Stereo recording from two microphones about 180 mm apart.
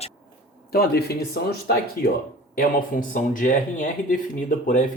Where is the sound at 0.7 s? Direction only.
60° left (ahead or behind).